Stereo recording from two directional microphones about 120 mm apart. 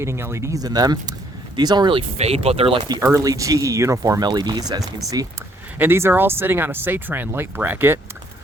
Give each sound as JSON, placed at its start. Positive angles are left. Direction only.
{"t": 0.0, "sound": "speech", "side_deg": -20}
{"t": 2.1, "sound": "speech", "side_deg": -60}
{"t": 3.0, "sound": "speech", "side_deg": -25}
{"t": 5.8, "sound": "speech", "side_deg": -20}